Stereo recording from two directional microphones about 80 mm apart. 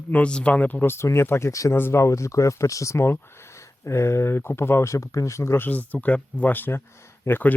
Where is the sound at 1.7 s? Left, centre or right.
Left.